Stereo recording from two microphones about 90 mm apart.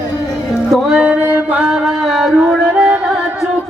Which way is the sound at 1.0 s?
15° right (ahead or behind).